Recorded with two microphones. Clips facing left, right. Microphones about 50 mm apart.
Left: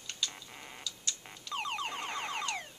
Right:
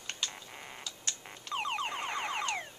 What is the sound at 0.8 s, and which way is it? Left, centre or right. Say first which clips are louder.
Tick-tock: left 1 dB; right.